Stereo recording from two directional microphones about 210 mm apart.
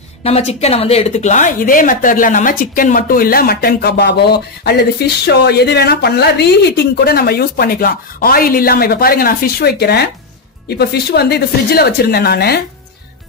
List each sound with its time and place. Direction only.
0.2 s a woman's voice: 30° left (ahead or behind); by 12.6 s 50° left (ahead or behind)